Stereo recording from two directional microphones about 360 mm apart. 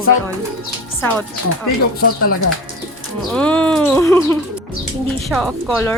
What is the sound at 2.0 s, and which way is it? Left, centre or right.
Speech, left.